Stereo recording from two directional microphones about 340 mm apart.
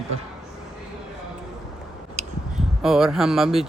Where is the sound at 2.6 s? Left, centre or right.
Centre.